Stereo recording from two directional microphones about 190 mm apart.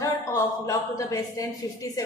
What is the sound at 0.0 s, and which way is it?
A woman's voice, 15° left (ahead or behind).